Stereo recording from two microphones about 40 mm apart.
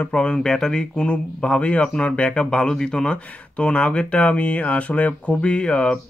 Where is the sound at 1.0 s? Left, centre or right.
Left.